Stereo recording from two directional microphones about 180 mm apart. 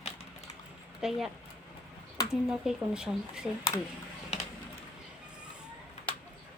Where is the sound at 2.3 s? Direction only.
5° right (ahead or behind).